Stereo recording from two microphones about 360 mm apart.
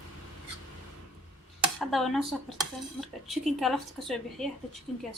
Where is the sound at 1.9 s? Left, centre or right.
Centre.